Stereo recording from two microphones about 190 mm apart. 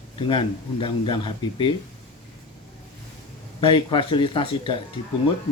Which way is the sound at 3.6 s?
25° left (ahead or behind).